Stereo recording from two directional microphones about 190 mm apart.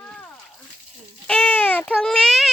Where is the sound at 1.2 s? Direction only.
5° left (ahead or behind).